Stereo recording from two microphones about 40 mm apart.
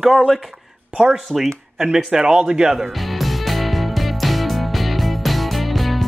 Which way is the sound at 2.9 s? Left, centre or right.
Centre.